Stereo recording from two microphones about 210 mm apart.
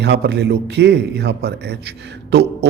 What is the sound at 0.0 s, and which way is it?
A man's voice, 55° right (ahead or behind).